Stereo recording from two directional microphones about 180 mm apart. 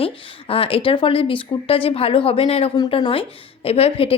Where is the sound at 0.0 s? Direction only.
30° left (ahead or behind).